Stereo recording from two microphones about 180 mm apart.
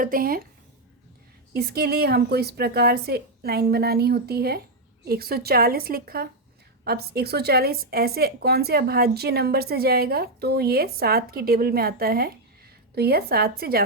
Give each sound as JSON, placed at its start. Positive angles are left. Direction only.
{"t": 0.0, "sound": "speech", "side_deg": -55}
{"t": 1.5, "sound": "a woman's voice", "side_deg": -60}